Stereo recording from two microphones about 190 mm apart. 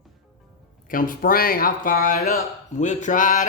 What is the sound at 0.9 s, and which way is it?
Speech, 45° left (ahead or behind).